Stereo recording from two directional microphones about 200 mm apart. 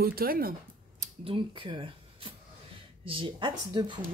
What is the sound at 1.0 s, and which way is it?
A woman's voice, 25° right (ahead or behind).